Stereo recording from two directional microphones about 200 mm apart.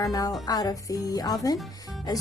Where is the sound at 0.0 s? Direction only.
20° left (ahead or behind).